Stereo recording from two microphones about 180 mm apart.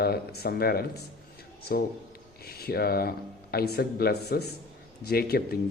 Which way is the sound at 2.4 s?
60° left (ahead or behind).